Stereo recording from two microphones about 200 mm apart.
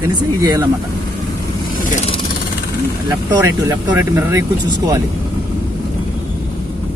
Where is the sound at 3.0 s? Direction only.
15° right (ahead or behind).